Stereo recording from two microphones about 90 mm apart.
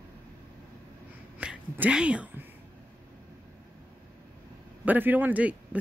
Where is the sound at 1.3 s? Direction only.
15° right (ahead or behind).